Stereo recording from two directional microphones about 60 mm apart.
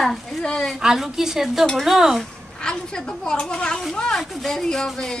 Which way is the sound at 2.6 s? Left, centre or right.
Centre.